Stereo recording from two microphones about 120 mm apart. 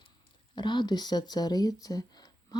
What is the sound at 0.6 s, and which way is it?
Speech, 40° left (ahead or behind).